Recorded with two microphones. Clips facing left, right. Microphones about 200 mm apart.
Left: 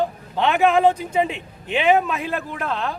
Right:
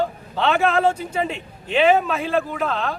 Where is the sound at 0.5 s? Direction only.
15° left (ahead or behind).